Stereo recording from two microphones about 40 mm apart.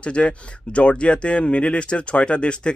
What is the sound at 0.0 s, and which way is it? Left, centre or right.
Speech, left.